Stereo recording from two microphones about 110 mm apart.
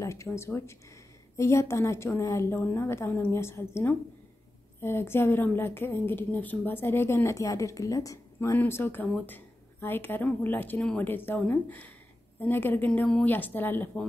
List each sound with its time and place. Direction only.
0.0 s a woman's voice: 25° left (ahead or behind)
10.8 s a woman's voice: 5° left (ahead or behind)
11.1 s a woman's voice: 20° left (ahead or behind)